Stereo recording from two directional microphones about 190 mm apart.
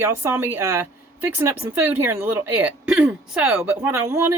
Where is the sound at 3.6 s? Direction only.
15° right (ahead or behind).